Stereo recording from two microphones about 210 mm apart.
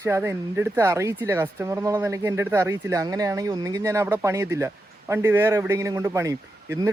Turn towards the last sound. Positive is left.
turn(degrees=-15)  # may be behind; listen again after turning